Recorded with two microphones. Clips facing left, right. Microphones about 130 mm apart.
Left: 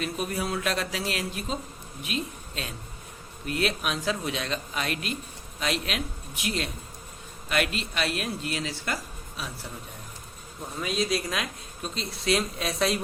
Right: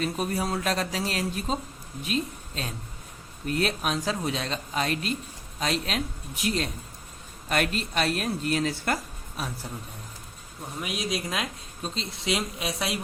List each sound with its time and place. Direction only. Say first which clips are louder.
0.0 s speech: right 2 dB; 35° right (ahead or behind)
10.8 s speech: left 3 dB; 15° right (ahead or behind)